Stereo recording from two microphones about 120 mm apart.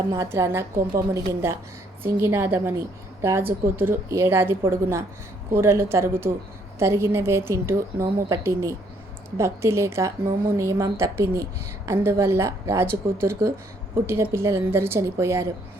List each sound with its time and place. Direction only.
0.1 s a woman's voice: 25° right (ahead or behind)